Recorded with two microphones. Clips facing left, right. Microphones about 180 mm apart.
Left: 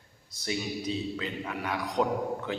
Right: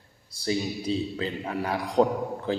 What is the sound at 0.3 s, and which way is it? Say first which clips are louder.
A man's voice: right 5 dB; 30° right (ahead or behind).